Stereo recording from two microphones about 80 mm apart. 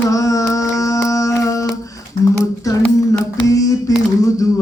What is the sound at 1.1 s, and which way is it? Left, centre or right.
Music, left.